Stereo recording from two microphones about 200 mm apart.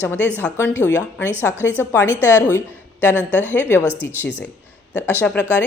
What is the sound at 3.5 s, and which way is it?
Speech, 10° left (ahead or behind).